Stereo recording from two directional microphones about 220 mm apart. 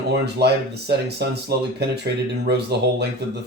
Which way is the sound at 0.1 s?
50° right (ahead or behind).